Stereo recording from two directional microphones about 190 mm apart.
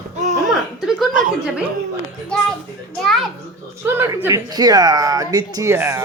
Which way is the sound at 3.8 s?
15° right (ahead or behind).